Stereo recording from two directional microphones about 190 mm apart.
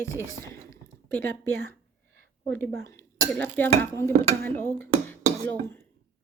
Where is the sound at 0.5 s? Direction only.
10° left (ahead or behind).